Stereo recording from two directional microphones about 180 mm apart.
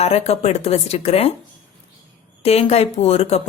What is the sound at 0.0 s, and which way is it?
Speech, 35° left (ahead or behind).